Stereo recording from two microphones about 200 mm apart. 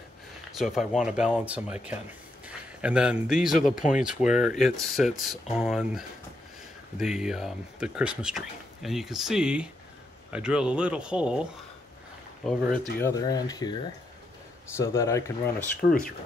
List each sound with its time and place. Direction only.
0.5 s a man's voice: centre (ahead or behind)
12.4 s speech: centre (ahead or behind)
13.0 s speech: 20° left (ahead or behind)
14.8 s speech: 15° left (ahead or behind)
15.8 s speech: 45° left (ahead or behind)